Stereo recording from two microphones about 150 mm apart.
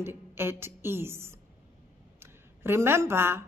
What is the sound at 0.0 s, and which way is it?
A woman's voice, 15° right (ahead or behind).